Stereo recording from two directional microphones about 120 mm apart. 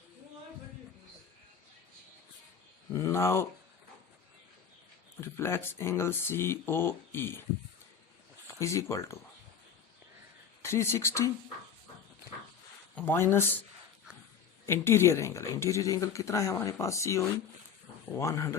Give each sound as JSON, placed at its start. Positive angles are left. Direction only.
{"t": 2.9, "sound": "speech", "side_deg": 25}
{"t": 5.2, "sound": "speech", "side_deg": 20}
{"t": 8.6, "sound": "speech", "side_deg": 25}
{"t": 10.6, "sound": "speech", "side_deg": 20}
{"t": 13.1, "sound": "speech", "side_deg": 20}
{"t": 14.7, "sound": "speech", "side_deg": 20}